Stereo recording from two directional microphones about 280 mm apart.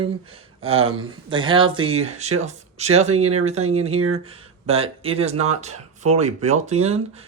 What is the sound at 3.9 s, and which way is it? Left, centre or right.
Speech, right.